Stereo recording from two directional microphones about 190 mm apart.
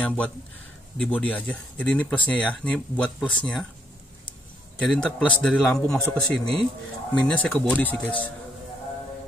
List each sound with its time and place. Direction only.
0.0 s speech: 5° left (ahead or behind)
4.8 s a man's voice: 5° left (ahead or behind)